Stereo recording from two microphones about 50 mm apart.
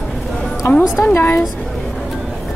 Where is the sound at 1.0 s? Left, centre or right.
Left.